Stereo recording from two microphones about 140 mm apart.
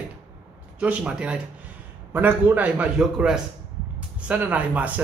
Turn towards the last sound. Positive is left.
turn(degrees=-10)  # may be behind; listen again after turning